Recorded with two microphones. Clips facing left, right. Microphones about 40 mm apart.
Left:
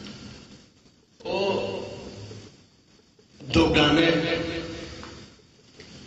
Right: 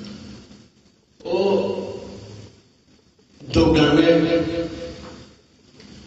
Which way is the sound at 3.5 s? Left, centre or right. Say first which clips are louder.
Right 4 dB; left.